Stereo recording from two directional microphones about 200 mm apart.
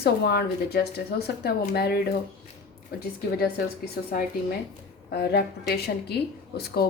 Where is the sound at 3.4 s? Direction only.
50° left (ahead or behind).